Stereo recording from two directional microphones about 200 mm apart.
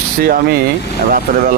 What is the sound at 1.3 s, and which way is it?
Speech, 45° right (ahead or behind).